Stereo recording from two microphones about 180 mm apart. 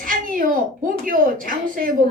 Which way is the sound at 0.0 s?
50° right (ahead or behind).